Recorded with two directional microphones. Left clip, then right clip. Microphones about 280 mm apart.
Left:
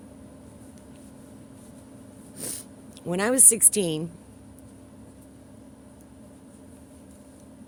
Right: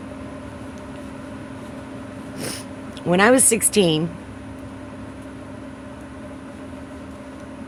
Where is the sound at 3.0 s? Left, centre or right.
Left.